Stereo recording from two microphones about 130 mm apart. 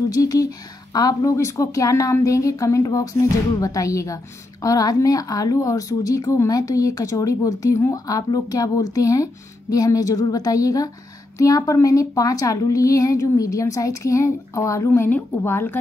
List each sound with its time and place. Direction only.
0.1 s speech: 25° left (ahead or behind)